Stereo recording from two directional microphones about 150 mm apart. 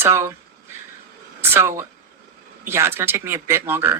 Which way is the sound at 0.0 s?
15° right (ahead or behind).